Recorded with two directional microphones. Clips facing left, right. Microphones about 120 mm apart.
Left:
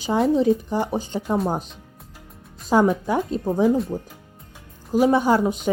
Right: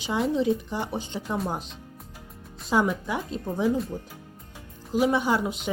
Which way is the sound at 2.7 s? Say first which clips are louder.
Left 6 dB; 40° left (ahead or behind).